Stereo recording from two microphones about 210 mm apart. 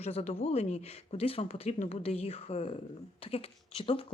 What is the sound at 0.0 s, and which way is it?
Speech, 30° left (ahead or behind).